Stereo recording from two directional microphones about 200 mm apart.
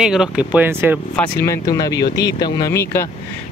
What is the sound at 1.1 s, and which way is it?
Speech, 10° left (ahead or behind).